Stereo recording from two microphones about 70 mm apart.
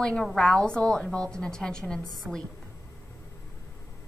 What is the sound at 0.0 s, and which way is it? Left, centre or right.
A woman's voice, centre.